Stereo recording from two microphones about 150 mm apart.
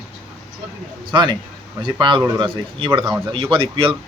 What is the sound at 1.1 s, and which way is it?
A man's voice, 30° right (ahead or behind).